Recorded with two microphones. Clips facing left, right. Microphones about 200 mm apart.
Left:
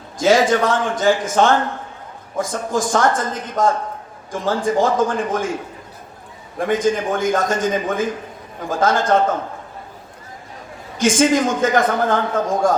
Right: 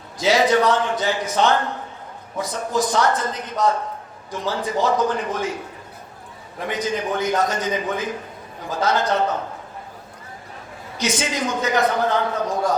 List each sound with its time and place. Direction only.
0.2 s a man's voice: 50° left (ahead or behind)
6.6 s a man's voice: 50° left (ahead or behind)
10.9 s a man's voice: 50° left (ahead or behind)